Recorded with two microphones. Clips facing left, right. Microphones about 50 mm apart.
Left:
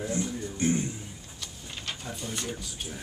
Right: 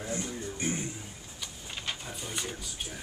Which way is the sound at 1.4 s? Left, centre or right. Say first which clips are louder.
Right 1 dB; centre.